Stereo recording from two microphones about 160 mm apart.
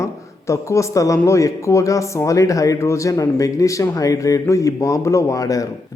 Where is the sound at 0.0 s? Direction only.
20° left (ahead or behind).